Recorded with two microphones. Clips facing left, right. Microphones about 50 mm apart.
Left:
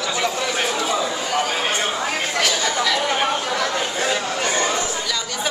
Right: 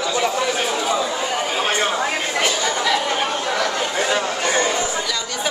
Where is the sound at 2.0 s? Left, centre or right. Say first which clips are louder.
Right 1 dB; centre.